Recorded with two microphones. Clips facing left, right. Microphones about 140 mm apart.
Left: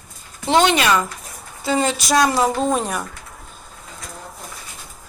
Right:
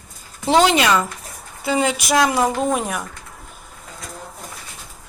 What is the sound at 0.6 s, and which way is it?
A woman's voice, 20° right (ahead or behind).